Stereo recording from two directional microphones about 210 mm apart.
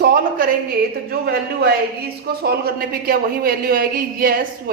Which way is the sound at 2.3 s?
50° right (ahead or behind).